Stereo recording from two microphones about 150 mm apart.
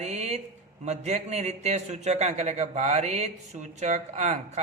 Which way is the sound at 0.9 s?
50° right (ahead or behind).